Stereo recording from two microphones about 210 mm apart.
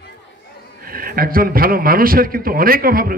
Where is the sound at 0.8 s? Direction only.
45° right (ahead or behind).